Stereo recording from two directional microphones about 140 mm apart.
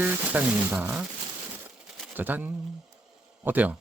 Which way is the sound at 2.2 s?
15° right (ahead or behind).